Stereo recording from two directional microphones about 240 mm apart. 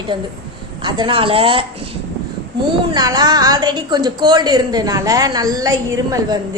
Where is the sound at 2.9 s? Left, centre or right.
Centre.